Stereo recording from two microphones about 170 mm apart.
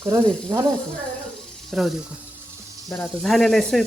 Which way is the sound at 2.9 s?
5° left (ahead or behind).